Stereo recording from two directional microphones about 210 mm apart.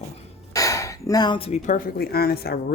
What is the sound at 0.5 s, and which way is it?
Speech, 15° left (ahead or behind).